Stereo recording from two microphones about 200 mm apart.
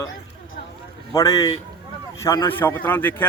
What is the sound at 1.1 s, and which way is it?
Speech, 15° left (ahead or behind).